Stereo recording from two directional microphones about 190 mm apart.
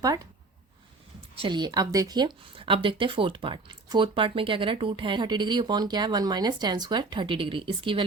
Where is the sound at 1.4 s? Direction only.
25° right (ahead or behind).